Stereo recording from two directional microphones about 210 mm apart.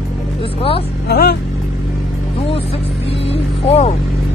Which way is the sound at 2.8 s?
55° left (ahead or behind).